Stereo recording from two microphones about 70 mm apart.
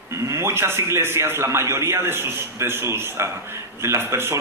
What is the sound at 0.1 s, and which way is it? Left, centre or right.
A man's voice, right.